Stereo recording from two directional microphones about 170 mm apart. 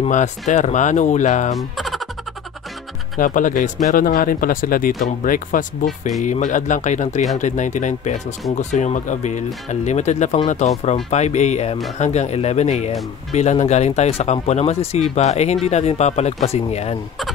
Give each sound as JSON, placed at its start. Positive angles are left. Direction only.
{"t": 0.0, "sound": "speech", "side_deg": 45}
{"t": 1.6, "sound": "music", "side_deg": 0}
{"t": 3.2, "sound": "speech", "side_deg": 50}
{"t": 5.9, "sound": "speech", "side_deg": 0}
{"t": 6.2, "sound": "speech", "side_deg": 45}